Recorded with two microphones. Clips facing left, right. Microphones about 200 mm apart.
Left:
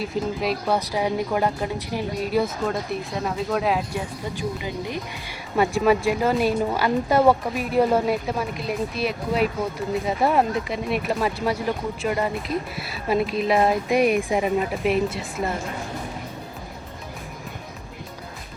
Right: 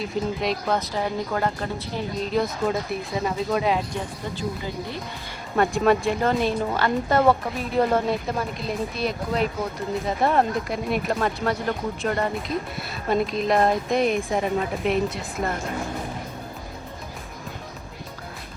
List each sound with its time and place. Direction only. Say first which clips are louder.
0.0 s speech: left 1 dB; 5° left (ahead or behind)
4.4 s speech: left 1 dB; 15° left (ahead or behind)
5.5 s speech: left 1 dB; 5° left (ahead or behind)